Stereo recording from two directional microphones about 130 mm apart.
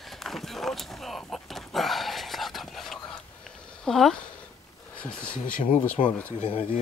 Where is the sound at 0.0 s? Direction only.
Centre (ahead or behind).